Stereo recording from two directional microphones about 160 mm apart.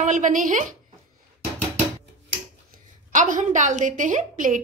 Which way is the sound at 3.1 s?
55° right (ahead or behind).